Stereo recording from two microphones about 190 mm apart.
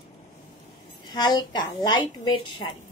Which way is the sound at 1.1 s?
20° left (ahead or behind).